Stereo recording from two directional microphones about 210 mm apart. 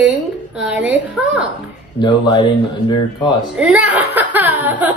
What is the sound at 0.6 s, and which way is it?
Speech, 5° right (ahead or behind).